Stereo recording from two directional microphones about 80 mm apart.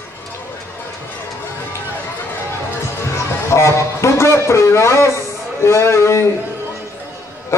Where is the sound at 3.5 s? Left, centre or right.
Left.